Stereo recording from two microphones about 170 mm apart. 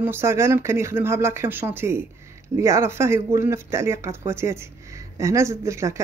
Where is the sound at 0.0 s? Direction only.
15° right (ahead or behind).